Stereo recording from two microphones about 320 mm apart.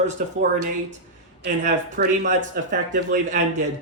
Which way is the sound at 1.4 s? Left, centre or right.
Right.